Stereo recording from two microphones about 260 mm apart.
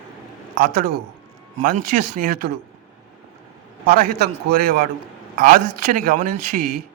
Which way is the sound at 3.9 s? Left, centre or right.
Right.